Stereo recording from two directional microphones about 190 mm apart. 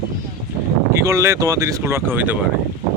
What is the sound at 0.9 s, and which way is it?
Speech, 15° right (ahead or behind).